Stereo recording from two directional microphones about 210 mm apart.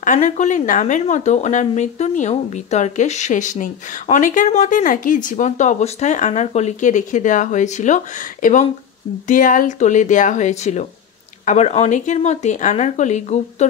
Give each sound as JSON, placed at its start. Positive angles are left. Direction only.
{"t": 0.0, "sound": "speech", "side_deg": 35}